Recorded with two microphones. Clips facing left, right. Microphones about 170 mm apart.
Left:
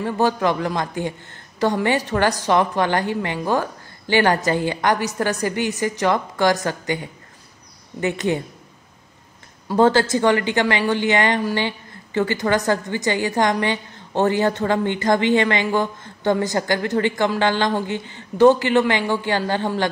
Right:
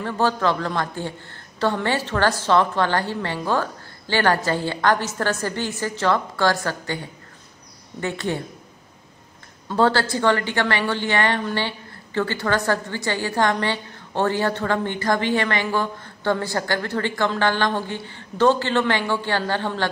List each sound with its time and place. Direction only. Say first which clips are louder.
0.0 s a woman's voice: left 2 dB; 15° left (ahead or behind)
9.7 s a woman's voice: left 4 dB; 15° left (ahead or behind)